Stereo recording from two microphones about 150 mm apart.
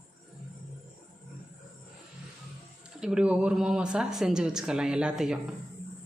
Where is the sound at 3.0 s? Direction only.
5° right (ahead or behind).